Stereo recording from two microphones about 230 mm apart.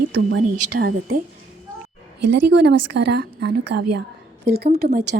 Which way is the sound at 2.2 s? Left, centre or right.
Right.